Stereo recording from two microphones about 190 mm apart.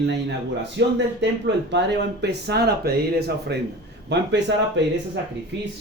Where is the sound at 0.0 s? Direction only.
65° right (ahead or behind).